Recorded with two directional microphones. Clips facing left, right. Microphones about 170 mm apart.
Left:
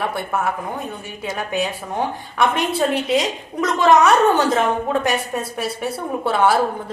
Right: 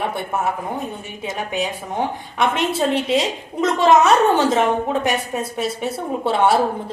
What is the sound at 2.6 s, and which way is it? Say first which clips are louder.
A woman's voice: even; 25° right (ahead or behind).